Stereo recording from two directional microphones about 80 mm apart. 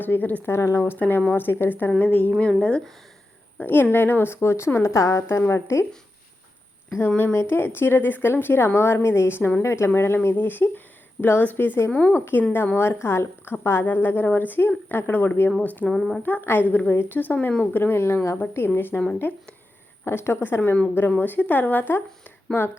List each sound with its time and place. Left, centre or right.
0.0 s a woman's voice: left
0.5 s a woman's voice: left; by 2.9 s centre
3.6 s a woman's voice: left
7.5 s a woman's voice: left
12.7 s a woman's voice: left
15.9 s speech: centre
16.2 s a woman's voice: left
20.1 s speech: left
20.6 s a woman's voice: centre